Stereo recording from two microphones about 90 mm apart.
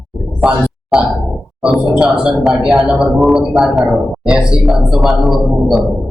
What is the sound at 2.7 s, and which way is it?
A man's voice, 10° right (ahead or behind).